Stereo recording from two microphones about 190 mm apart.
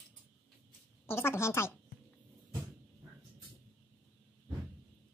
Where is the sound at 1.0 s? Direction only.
15° left (ahead or behind).